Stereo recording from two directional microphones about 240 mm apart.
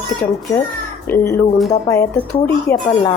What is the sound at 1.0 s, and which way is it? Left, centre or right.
A woman's voice, centre.